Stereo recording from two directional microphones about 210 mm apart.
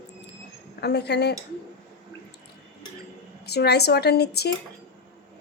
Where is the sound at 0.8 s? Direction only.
50° left (ahead or behind).